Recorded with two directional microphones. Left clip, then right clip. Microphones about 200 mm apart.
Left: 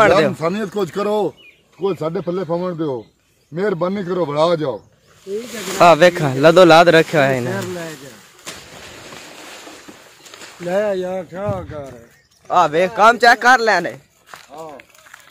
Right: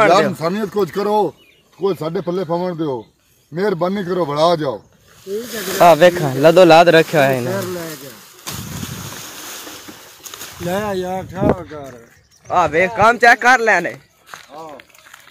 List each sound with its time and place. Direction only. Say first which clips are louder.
0.4 s speech: right 1 dB; centre (ahead or behind)
5.8 s speech: right 1 dB; 10° left (ahead or behind)
9.9 s a sound: right 3 dB; 45° right (ahead or behind)
10.6 s speech: left 2 dB; 45° right (ahead or behind)
12.4 s speech: even; 10° left (ahead or behind)